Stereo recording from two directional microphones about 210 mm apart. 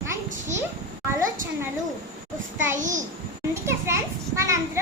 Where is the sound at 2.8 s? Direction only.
35° right (ahead or behind).